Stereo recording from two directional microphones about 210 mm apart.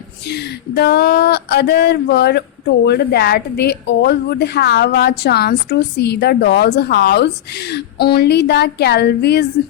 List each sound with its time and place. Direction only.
0.3 s speech: 50° left (ahead or behind)